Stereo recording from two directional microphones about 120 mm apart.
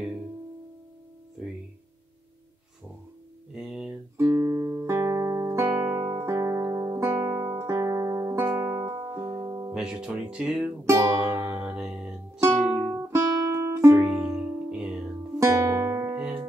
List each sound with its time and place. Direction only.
3.5 s a sound: 5° right (ahead or behind)
4.2 s music: 25° right (ahead or behind)
6.1 s guitar: 25° right (ahead or behind)
9.8 s music: 10° right (ahead or behind)
10.9 s music: 25° right (ahead or behind); by 12.9 s 5° right (ahead or behind)
13.1 s music: 20° right (ahead or behind)
14.0 s music: 10° right (ahead or behind)
15.3 s guitar: 25° right (ahead or behind)